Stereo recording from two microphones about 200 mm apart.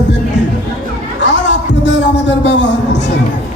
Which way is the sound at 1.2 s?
60° left (ahead or behind).